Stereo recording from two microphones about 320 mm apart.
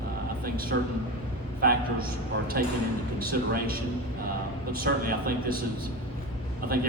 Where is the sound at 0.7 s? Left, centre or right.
Right.